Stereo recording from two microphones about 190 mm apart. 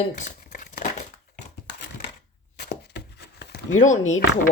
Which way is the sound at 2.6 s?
60° left (ahead or behind).